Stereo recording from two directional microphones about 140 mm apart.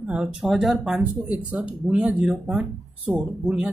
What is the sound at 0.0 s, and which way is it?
A woman's voice, 10° right (ahead or behind).